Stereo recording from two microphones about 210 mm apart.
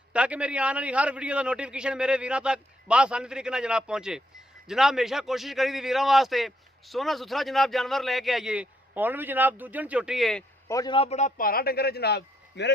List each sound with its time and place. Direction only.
0.1 s a man's voice: 5° right (ahead or behind)
10.7 s a man's voice: 20° left (ahead or behind); by 12.7 s 55° left (ahead or behind)